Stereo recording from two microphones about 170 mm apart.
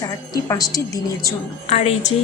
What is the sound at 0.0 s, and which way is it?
A woman's voice, 20° left (ahead or behind).